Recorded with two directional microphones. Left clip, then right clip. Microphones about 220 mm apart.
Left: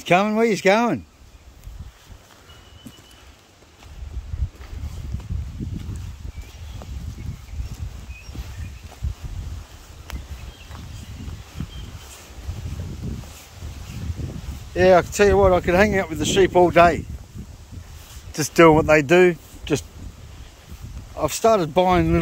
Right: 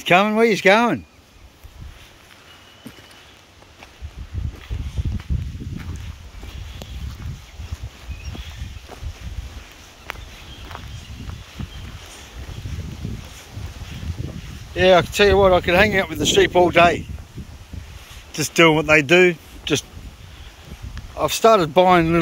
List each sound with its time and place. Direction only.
0.0 s speech: 10° left (ahead or behind)
14.8 s speech: 20° left (ahead or behind)
18.3 s speech: 20° left (ahead or behind)
21.2 s speech: 10° left (ahead or behind)